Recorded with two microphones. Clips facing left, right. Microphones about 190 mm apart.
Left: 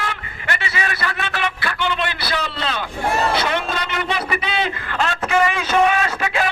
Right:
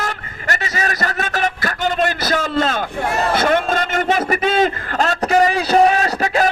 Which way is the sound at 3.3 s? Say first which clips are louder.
Right 5 dB; 50° right (ahead or behind).